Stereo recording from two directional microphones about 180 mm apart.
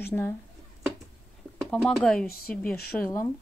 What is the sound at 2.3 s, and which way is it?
Speech, 55° left (ahead or behind).